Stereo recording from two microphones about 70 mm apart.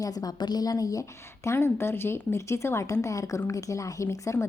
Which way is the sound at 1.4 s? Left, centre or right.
Left.